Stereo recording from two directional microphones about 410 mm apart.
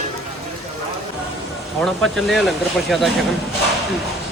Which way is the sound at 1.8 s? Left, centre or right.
Centre.